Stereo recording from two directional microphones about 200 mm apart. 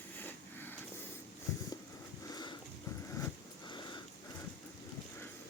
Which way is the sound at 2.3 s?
20° left (ahead or behind).